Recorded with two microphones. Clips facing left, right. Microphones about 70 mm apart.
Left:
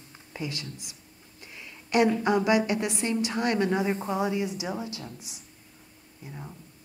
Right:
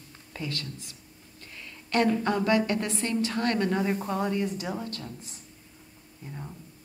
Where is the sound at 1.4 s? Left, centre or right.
Centre.